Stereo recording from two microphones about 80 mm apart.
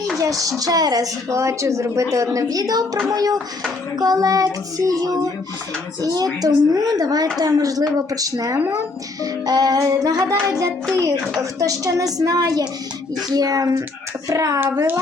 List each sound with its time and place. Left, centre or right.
0.2 s speech: right
6.0 s speech: right